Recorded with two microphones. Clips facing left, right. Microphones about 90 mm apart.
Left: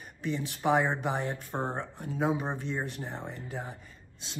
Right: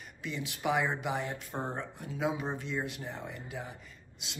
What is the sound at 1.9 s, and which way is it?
Speech, 40° left (ahead or behind).